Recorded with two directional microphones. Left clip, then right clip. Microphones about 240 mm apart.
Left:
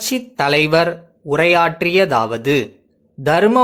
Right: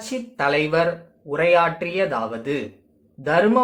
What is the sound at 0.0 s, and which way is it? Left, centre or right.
Speech, left.